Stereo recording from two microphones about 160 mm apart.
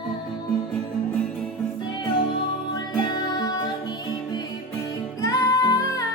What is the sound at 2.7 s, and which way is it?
Music, 25° left (ahead or behind).